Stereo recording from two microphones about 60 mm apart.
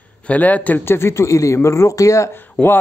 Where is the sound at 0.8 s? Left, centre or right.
Left.